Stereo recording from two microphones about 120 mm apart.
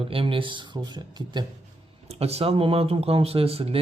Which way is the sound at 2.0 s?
60° right (ahead or behind).